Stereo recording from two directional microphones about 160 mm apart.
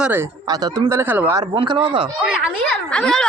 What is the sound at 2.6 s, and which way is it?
Speech, centre (ahead or behind).